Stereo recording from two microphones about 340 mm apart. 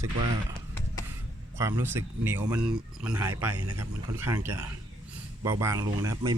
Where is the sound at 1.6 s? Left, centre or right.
Centre.